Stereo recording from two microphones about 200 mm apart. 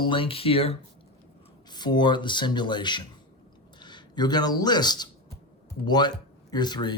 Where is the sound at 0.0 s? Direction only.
25° left (ahead or behind).